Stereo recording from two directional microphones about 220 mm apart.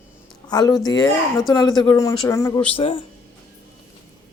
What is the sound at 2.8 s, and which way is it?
Speech, 25° left (ahead or behind).